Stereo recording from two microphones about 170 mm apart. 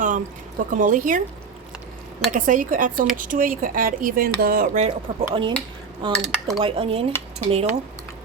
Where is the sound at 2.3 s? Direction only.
50° right (ahead or behind).